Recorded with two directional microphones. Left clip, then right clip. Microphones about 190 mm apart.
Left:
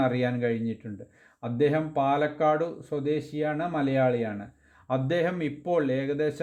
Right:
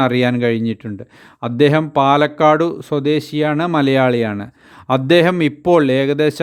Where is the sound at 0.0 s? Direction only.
40° right (ahead or behind).